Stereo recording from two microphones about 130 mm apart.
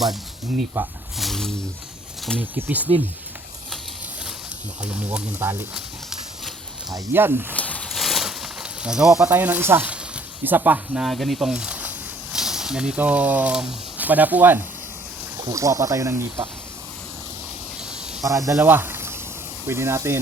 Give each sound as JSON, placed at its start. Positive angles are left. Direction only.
{"t": 0.8, "sound": "speech", "side_deg": -15}
{"t": 1.1, "sound": "a sound", "side_deg": 0}
{"t": 2.4, "sound": "speech", "side_deg": -15}
{"t": 4.8, "sound": "speech", "side_deg": -10}
{"t": 5.7, "sound": "horse", "side_deg": -5}
{"t": 7.1, "sound": "speech", "side_deg": -15}
{"t": 7.5, "sound": "a sound", "side_deg": 10}
{"t": 7.9, "sound": "a sound", "side_deg": 0}
{"t": 10.4, "sound": "speech", "side_deg": -15}
{"t": 11.0, "sound": "speech", "side_deg": 0}
{"t": 15.4, "sound": "speech", "side_deg": -25}
{"t": 18.2, "sound": "speech", "side_deg": -25}